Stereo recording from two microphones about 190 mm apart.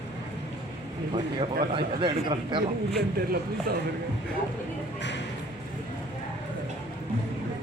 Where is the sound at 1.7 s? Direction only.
25° right (ahead or behind).